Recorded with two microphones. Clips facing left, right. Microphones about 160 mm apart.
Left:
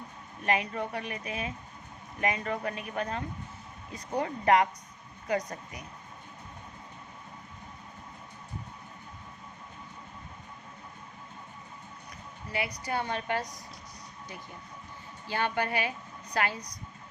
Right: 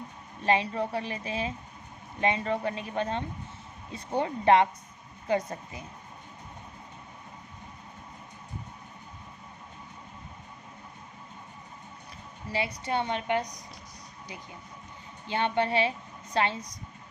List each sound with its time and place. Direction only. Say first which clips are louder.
0.4 s a woman's voice: right 3 dB; 30° right (ahead or behind)
12.5 s a woman's voice: right 3 dB; 25° right (ahead or behind)
15.3 s a woman's voice: right 3 dB; 25° right (ahead or behind)